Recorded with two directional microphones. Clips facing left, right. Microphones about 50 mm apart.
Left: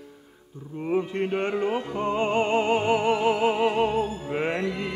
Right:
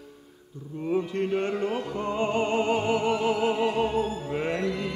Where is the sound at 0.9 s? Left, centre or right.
Left.